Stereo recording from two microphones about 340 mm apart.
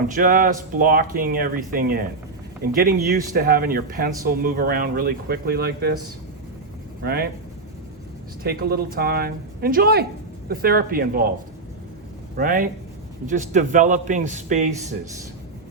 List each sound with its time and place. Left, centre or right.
0.1 s speech: right
7.0 s speech: right
8.4 s speech: right
12.4 s speech: right